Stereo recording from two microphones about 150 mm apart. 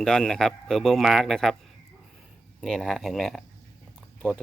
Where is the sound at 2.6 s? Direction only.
Centre (ahead or behind).